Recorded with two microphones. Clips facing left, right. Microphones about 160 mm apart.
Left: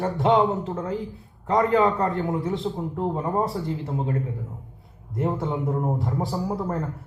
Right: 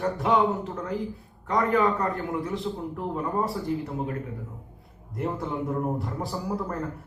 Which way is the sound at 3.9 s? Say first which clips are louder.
Left 3 dB; 25° left (ahead or behind).